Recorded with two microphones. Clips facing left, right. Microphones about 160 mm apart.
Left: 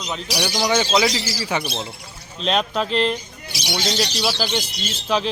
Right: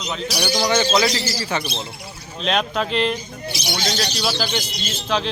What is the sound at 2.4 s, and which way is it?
Speech, centre (ahead or behind).